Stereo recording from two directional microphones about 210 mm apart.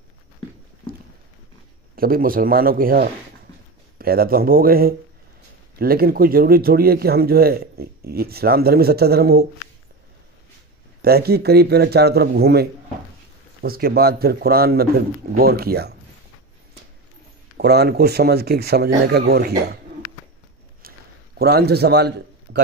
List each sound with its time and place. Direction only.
2.0 s a man's voice: 45° right (ahead or behind)
11.0 s a man's voice: 50° right (ahead or behind)
17.6 s a man's voice: 50° right (ahead or behind)
20.8 s a sound: 45° right (ahead or behind)
21.4 s a man's voice: 50° right (ahead or behind)